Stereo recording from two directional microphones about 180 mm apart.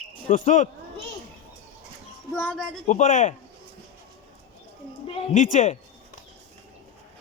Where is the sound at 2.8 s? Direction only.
45° left (ahead or behind).